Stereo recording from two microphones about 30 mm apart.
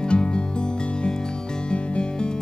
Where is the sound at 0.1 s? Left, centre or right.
Left.